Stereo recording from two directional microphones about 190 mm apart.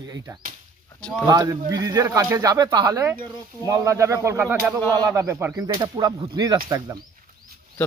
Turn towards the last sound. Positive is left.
turn(degrees=-20)  # may be behind; listen again after turning